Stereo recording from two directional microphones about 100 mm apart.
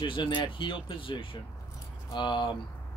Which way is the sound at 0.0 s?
55° left (ahead or behind).